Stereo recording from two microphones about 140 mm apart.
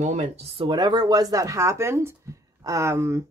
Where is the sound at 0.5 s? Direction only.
30° right (ahead or behind).